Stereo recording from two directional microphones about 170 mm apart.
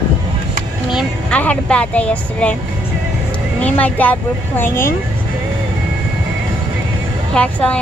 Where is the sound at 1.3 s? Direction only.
5° left (ahead or behind).